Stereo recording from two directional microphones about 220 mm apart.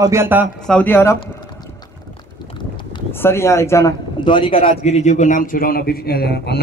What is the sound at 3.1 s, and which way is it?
A man's voice, 10° left (ahead or behind).